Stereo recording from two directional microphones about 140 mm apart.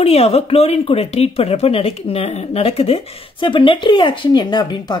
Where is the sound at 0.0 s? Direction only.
45° left (ahead or behind).